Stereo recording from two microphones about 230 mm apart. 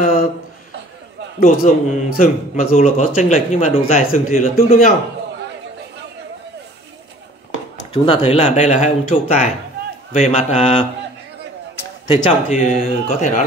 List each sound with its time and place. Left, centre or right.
1.4 s a man's voice: left
7.9 s speech: left
12.1 s a man's voice: left